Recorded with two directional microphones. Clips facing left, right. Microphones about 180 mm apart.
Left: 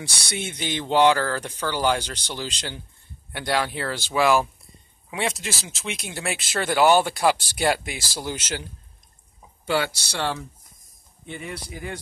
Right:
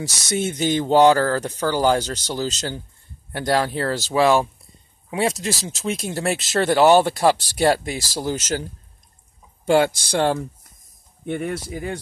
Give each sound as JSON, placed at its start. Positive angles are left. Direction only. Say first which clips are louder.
{"t": 0.0, "sound": "speech", "louder": "right 8 dB", "side_deg": -40}
{"t": 9.7, "sound": "speech", "louder": "right 8 dB", "side_deg": -45}